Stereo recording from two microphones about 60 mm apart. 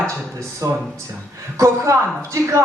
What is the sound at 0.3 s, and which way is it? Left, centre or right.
A man's voice, right.